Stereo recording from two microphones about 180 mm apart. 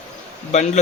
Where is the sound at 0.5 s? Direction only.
40° left (ahead or behind).